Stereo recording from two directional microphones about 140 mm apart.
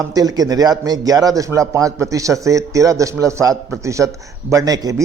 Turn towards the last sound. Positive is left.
turn(degrees=-25)  # may be behind; listen again after turning